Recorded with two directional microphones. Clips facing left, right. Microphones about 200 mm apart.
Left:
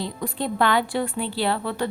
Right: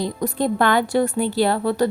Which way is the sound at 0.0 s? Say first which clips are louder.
Right 6 dB; 40° right (ahead or behind).